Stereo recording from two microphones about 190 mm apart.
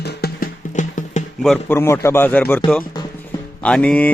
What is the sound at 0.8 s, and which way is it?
Music, 40° left (ahead or behind).